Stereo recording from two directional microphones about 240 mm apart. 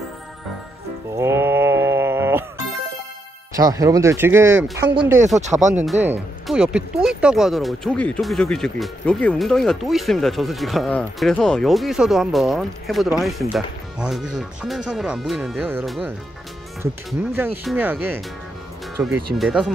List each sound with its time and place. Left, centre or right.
1.1 s sheep: centre
3.5 s speech: centre
5.4 s speech: right
6.0 s speech: centre